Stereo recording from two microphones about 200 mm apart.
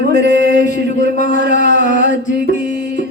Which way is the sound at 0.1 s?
40° left (ahead or behind).